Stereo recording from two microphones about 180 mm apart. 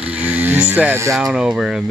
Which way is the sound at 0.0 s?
5° right (ahead or behind).